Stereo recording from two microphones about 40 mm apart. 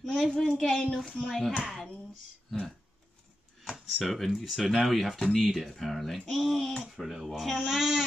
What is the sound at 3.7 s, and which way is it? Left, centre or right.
Speech, centre.